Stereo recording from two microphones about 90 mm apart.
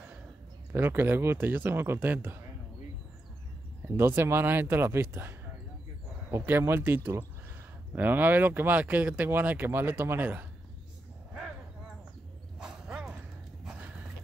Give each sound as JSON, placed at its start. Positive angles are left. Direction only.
{"t": 0.7, "sound": "speech", "side_deg": -25}
{"t": 3.8, "sound": "speech", "side_deg": -25}
{"t": 6.4, "sound": "speech", "side_deg": -25}
{"t": 12.5, "sound": "dog", "side_deg": -5}